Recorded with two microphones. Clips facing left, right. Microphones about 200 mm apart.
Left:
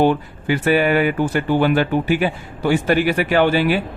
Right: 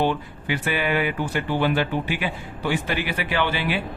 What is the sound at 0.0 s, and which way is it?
Speech, 45° left (ahead or behind).